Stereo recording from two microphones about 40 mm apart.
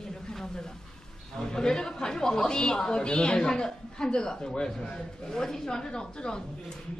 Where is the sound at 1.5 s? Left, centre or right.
Centre.